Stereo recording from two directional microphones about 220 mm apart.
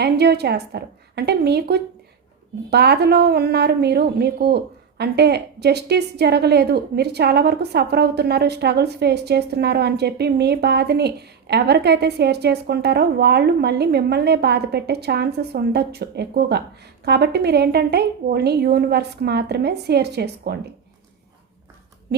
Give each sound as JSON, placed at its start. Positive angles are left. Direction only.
{"t": 0.0, "sound": "speech", "side_deg": -50}